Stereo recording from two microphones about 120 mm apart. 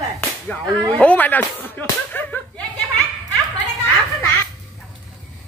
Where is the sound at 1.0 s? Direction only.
15° left (ahead or behind).